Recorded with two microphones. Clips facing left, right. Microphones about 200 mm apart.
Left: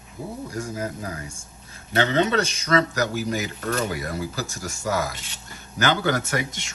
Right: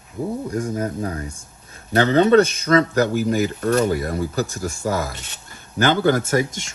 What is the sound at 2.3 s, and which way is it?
Speech, 55° right (ahead or behind).